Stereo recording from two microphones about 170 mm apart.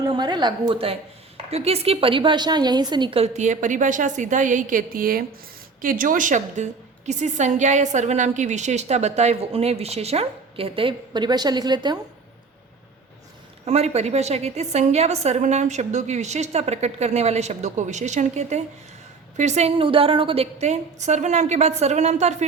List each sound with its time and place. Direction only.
0.0 s a woman's voice: 25° right (ahead or behind)
13.7 s a woman's voice: 40° right (ahead or behind)